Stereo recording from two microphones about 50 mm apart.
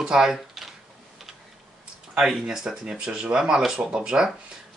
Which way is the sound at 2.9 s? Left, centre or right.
Right.